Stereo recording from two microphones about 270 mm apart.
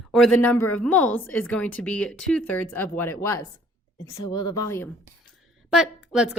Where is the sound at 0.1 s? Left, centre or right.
Centre.